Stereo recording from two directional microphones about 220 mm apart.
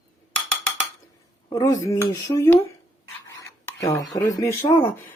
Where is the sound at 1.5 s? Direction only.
15° left (ahead or behind).